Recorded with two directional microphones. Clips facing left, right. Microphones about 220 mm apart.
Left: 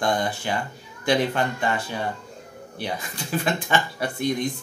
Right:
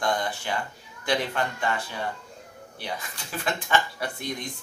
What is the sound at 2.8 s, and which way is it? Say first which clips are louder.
Speech: left 5 dB; 20° left (ahead or behind).